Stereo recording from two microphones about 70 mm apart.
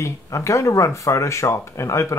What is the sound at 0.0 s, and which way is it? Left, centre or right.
Speech, left.